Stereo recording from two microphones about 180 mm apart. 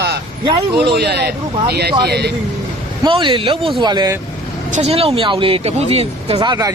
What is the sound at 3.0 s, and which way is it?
A man's voice, 25° right (ahead or behind).